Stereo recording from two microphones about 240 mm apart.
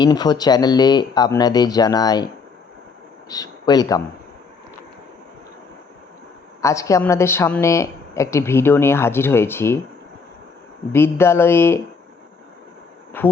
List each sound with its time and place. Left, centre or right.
0.0 s a woman's voice: centre
6.6 s a woman's voice: centre
10.9 s a woman's voice: centre
13.1 s speech: centre